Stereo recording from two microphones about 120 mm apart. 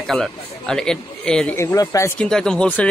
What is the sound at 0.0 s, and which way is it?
Speech, 5° left (ahead or behind).